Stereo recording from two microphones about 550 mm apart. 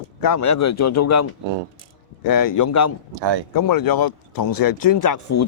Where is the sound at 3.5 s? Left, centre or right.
Left.